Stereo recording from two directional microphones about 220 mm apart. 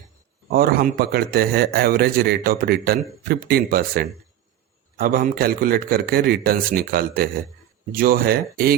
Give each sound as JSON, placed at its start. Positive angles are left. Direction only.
{"t": 0.5, "sound": "a man's voice", "side_deg": -45}